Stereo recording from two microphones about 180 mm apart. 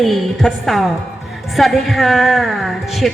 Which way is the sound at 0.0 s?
Centre (ahead or behind).